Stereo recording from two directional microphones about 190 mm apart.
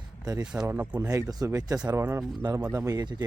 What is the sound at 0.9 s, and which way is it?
Speech, 20° right (ahead or behind).